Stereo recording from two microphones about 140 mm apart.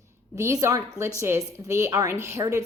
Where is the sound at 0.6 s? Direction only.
20° right (ahead or behind).